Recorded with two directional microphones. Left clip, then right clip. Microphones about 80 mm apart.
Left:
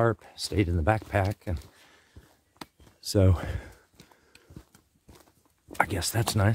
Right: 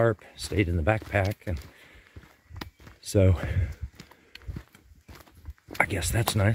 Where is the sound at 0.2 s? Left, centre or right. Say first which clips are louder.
Right 1 dB; left.